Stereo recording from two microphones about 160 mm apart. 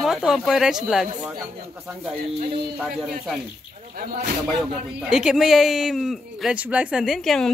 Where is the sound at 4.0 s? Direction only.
70° right (ahead or behind).